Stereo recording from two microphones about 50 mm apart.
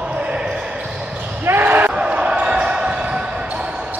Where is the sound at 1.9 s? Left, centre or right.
Centre.